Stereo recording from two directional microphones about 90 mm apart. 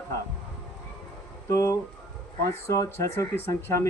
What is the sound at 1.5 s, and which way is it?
Speech, 35° left (ahead or behind).